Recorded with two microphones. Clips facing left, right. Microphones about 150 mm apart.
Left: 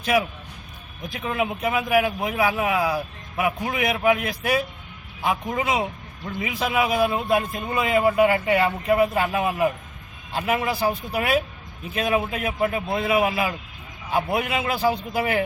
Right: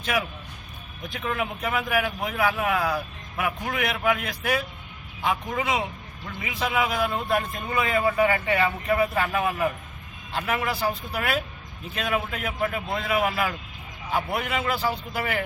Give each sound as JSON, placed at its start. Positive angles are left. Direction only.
{"t": 1.2, "sound": "a man's voice", "side_deg": 20}